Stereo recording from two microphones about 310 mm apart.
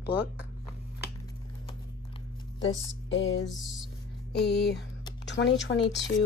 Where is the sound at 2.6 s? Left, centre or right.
Left.